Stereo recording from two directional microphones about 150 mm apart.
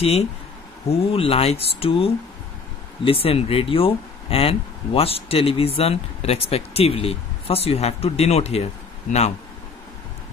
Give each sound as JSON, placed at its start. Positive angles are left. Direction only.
{"t": 0.0, "sound": "speech", "side_deg": 45}